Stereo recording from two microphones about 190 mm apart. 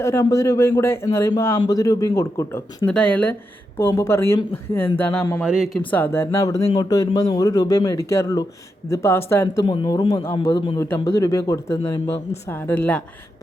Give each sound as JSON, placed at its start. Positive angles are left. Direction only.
{"t": 0.0, "sound": "speech", "side_deg": 15}
{"t": 5.4, "sound": "speech", "side_deg": 0}
{"t": 5.9, "sound": "speech", "side_deg": 10}
{"t": 9.6, "sound": "speech", "side_deg": 25}
{"t": 10.8, "sound": "speech", "side_deg": 15}